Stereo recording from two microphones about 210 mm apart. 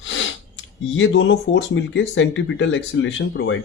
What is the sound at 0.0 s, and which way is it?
Speech, 65° left (ahead or behind).